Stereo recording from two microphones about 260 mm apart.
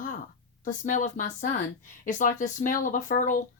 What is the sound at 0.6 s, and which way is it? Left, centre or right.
Speech, left.